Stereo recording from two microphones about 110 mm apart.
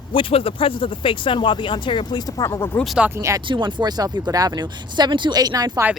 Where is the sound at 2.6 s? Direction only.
20° left (ahead or behind).